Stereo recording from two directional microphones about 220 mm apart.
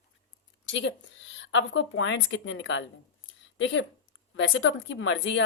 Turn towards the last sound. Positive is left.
turn(degrees=60)  # may be behind; listen again after turning